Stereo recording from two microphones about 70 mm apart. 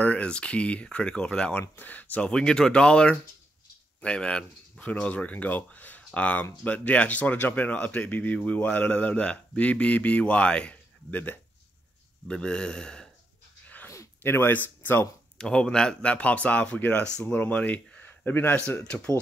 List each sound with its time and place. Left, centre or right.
0.0 s a man's voice: centre
1.5 s speech: left
2.3 s a man's voice: centre; by 11.3 s left
12.3 s a man's voice: centre
13.8 s a sound: left
15.3 s a man's voice: centre